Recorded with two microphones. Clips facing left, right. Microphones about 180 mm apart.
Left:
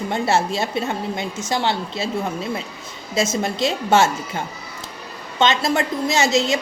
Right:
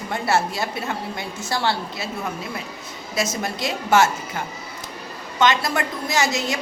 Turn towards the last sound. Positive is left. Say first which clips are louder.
# left 4 dB
turn(degrees=25)  # may be behind; listen again after turning